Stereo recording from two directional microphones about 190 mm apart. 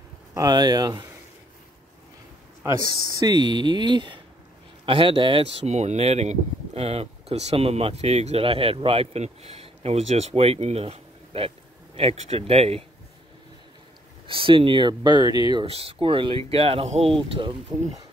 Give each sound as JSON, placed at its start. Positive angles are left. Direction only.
{"t": 0.3, "sound": "speech", "side_deg": -20}
{"t": 2.6, "sound": "speech", "side_deg": -20}
{"t": 14.2, "sound": "speech", "side_deg": -25}